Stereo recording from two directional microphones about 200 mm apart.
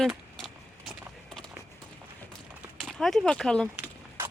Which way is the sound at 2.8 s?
Centre (ahead or behind).